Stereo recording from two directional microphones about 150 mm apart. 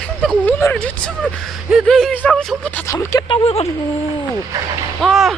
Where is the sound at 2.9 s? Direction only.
25° left (ahead or behind).